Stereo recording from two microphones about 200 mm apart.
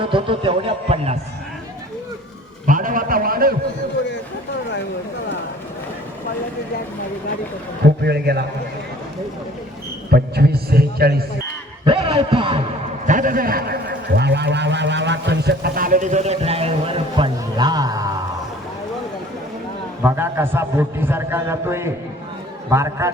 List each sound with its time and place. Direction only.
0.0 s speech: 25° right (ahead or behind)
2.6 s a man's voice: 40° right (ahead or behind)
7.9 s a man's voice: 55° right (ahead or behind)
10.1 s a man's voice: 50° right (ahead or behind)
11.9 s speech: 30° right (ahead or behind)
13.1 s speech: 40° right (ahead or behind); by 18.1 s 20° right (ahead or behind)
20.0 s a man's voice: 10° right (ahead or behind)